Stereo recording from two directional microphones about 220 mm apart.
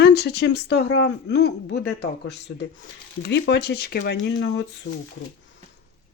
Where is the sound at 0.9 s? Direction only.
75° left (ahead or behind).